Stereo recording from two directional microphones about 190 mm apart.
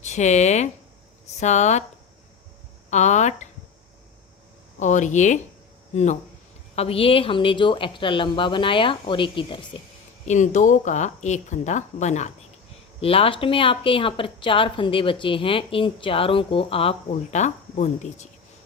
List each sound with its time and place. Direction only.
0.0 s speech: 40° left (ahead or behind)
2.9 s speech: 40° left (ahead or behind)
4.8 s speech: 40° left (ahead or behind)
10.2 s speech: 40° left (ahead or behind)